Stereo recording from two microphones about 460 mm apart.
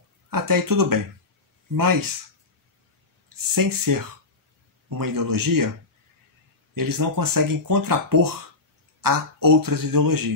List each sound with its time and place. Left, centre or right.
0.3 s speech: right
3.5 s speech: right
6.7 s speech: right